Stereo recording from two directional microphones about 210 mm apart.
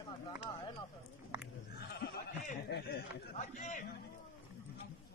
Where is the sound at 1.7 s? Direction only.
50° left (ahead or behind).